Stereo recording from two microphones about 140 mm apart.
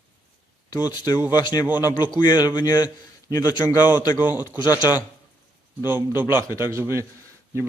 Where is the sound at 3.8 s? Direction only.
15° right (ahead or behind).